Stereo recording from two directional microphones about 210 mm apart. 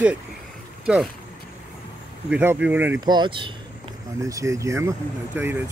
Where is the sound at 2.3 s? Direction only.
5° right (ahead or behind).